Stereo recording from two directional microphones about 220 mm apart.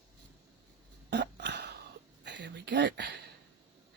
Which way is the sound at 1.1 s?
50° right (ahead or behind).